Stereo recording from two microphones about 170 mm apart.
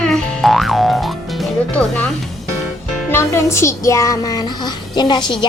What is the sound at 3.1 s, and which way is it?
Speech, 15° left (ahead or behind).